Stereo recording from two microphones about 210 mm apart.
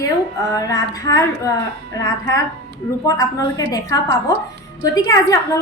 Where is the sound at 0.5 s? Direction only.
15° left (ahead or behind).